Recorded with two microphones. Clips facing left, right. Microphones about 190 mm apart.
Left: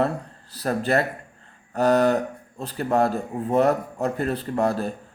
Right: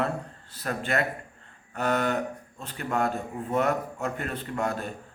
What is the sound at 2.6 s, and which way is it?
A man's voice, 35° left (ahead or behind).